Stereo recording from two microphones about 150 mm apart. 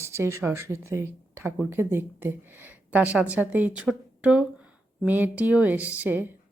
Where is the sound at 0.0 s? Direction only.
20° right (ahead or behind).